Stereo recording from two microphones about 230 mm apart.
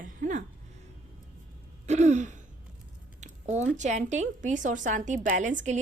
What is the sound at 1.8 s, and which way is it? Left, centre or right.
A woman's voice, right.